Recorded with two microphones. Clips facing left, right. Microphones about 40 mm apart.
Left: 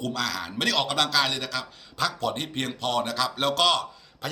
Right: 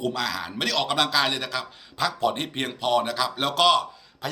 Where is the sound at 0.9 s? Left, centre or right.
Centre.